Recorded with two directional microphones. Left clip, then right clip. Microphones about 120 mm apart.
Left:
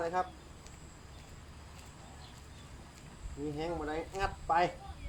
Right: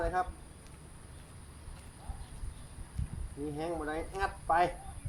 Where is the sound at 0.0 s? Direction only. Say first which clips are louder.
Right 1 dB; 5° right (ahead or behind).